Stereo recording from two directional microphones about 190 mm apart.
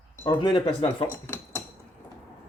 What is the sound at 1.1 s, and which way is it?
Dishes, 15° left (ahead or behind).